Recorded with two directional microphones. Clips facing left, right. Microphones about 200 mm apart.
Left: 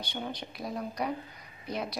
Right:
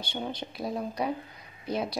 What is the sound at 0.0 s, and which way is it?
Speech, 25° right (ahead or behind).